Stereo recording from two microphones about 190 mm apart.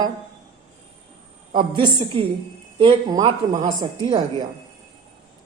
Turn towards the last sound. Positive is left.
turn(degrees=-25)  # may be behind; listen again after turning